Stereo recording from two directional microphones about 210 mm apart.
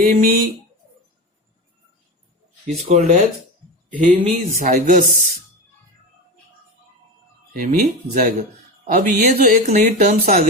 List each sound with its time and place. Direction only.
0.0 s speech: 40° right (ahead or behind)
2.8 s speech: 35° right (ahead or behind)
7.5 s speech: 40° right (ahead or behind)